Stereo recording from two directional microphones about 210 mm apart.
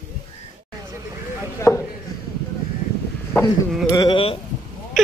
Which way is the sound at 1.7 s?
15° left (ahead or behind).